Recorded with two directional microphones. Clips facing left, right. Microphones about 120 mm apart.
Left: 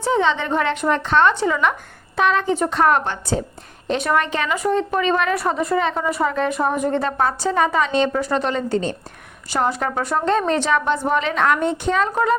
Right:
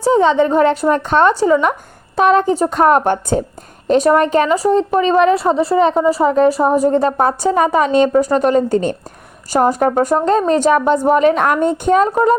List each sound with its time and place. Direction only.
0.0 s a woman's voice: 40° right (ahead or behind)
3.8 s a woman's voice: 40° right (ahead or behind)